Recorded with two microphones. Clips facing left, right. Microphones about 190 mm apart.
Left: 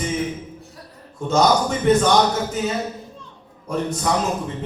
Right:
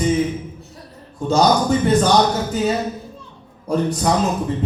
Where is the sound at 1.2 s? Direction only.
35° right (ahead or behind).